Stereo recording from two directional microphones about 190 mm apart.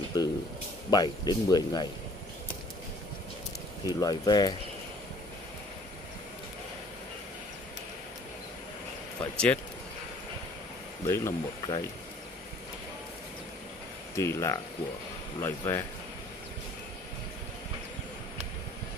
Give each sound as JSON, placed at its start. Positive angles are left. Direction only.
{"t": 0.2, "sound": "speech", "side_deg": 20}
{"t": 3.8, "sound": "speech", "side_deg": 20}
{"t": 9.2, "sound": "speech", "side_deg": 5}
{"t": 11.1, "sound": "speech", "side_deg": 15}
{"t": 14.1, "sound": "speech", "side_deg": 15}